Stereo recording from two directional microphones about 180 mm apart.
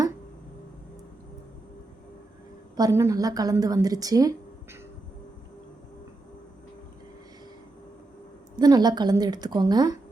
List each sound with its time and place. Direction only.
2.7 s a woman's voice: 20° right (ahead or behind)
8.5 s a woman's voice: 20° right (ahead or behind)